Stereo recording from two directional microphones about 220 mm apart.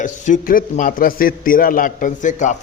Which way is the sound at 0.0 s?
35° left (ahead or behind).